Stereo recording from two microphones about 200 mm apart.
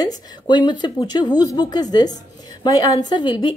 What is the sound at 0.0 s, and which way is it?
Speech, 20° left (ahead or behind).